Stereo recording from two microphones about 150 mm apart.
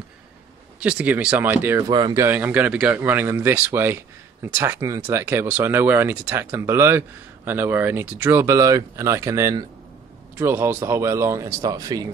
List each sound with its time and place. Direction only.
0.7 s speech: 10° right (ahead or behind)
1.9 s speech: 30° right (ahead or behind)
2.2 s speech: 15° right (ahead or behind)